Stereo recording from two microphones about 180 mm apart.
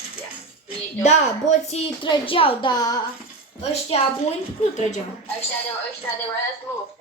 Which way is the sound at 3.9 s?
35° left (ahead or behind).